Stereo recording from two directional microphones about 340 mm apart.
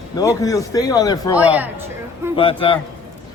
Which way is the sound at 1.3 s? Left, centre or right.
Centre.